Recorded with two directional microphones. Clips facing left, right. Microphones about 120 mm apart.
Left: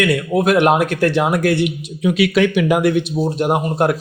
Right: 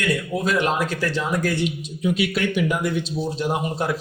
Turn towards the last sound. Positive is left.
turn(degrees=55)  # may be behind; listen again after turning